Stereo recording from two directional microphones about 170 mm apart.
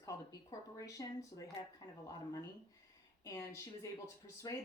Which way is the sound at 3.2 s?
20° left (ahead or behind).